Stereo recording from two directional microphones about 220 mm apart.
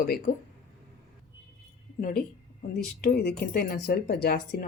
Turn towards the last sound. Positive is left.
turn(degrees=45)  # may be behind; listen again after turning